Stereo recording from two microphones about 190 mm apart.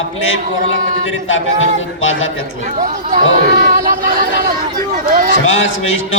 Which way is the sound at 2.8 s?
40° right (ahead or behind).